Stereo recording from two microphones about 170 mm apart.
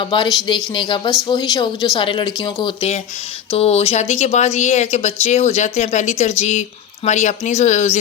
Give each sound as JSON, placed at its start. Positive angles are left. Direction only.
{"t": 0.0, "sound": "speech", "side_deg": 30}